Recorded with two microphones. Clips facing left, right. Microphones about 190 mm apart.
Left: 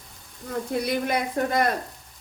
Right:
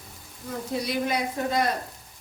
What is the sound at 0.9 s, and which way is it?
Speech, 55° left (ahead or behind).